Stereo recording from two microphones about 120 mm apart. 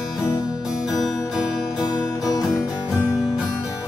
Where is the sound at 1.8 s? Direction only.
30° left (ahead or behind).